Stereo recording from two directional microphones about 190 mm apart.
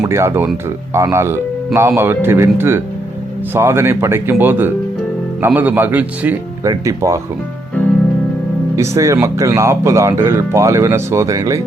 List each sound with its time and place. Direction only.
0.0 s speech: 15° right (ahead or behind)
8.7 s speech: 15° right (ahead or behind)